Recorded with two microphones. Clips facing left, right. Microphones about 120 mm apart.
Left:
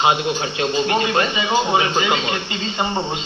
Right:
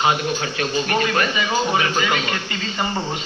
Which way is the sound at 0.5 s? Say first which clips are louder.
Left 3 dB; 25° left (ahead or behind).